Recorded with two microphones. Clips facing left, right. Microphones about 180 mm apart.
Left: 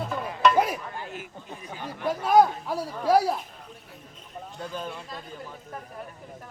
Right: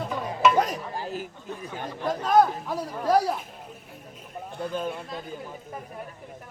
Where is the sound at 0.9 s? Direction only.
35° right (ahead or behind).